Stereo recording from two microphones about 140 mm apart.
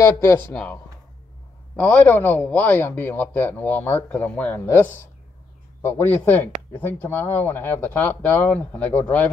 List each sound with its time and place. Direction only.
0.0 s a man's voice: 15° left (ahead or behind)
1.8 s a man's voice: 10° left (ahead or behind)
5.8 s a man's voice: 15° left (ahead or behind)